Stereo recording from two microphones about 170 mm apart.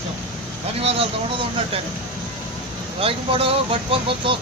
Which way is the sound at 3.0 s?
30° right (ahead or behind).